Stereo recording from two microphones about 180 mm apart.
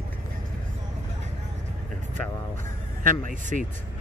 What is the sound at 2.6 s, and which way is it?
Speech, 45° right (ahead or behind).